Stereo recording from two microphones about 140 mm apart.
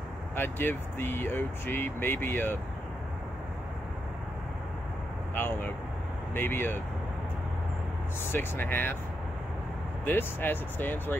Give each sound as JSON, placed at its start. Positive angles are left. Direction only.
{"t": 0.4, "sound": "speech", "side_deg": 15}
{"t": 5.3, "sound": "speech", "side_deg": 15}
{"t": 8.3, "sound": "speech", "side_deg": 15}
{"t": 10.0, "sound": "speech", "side_deg": 15}